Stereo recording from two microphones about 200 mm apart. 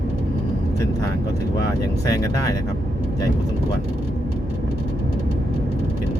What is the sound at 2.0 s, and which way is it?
Speech, 20° left (ahead or behind).